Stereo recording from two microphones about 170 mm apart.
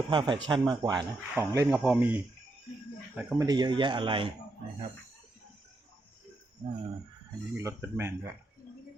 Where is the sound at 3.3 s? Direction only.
20° right (ahead or behind).